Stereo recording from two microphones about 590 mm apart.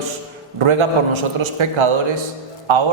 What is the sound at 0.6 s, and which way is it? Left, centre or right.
A man's voice, right.